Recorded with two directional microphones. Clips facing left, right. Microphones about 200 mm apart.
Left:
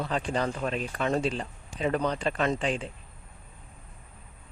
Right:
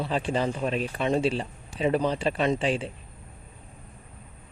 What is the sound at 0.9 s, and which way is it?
A man's voice, 20° right (ahead or behind).